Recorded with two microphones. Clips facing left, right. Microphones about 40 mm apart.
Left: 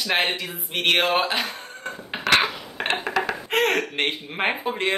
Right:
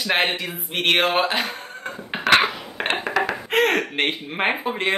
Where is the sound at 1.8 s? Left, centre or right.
Centre.